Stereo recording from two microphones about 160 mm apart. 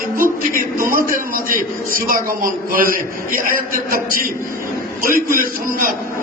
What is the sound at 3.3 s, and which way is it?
A man's voice, 60° right (ahead or behind).